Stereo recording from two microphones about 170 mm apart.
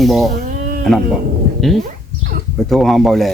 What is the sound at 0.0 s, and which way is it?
Speech, centre (ahead or behind).